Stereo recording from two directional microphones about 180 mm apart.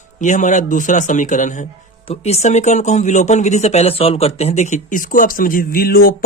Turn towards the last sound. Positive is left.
turn(degrees=55)  # may be behind; listen again after turning